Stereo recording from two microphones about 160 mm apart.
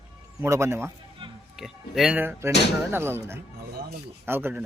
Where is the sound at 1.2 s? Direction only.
35° right (ahead or behind).